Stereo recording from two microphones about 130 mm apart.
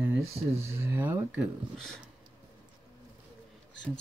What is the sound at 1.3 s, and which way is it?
Speech, 5° left (ahead or behind).